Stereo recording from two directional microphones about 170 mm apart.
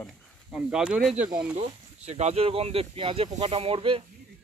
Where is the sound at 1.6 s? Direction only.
40° right (ahead or behind).